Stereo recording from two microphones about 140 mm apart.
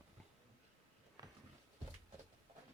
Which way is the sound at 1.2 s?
30° right (ahead or behind).